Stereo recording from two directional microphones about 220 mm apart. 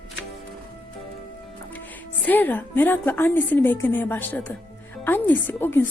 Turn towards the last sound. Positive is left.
turn(degrees=10)  # may be behind; listen again after turning